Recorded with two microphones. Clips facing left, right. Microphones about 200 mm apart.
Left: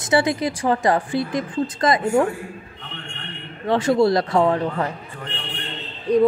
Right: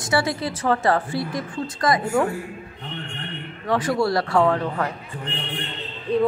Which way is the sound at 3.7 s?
25° left (ahead or behind).